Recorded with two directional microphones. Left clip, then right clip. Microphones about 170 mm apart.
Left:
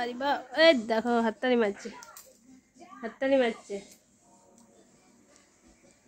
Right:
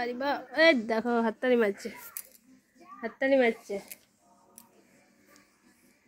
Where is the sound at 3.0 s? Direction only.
25° right (ahead or behind).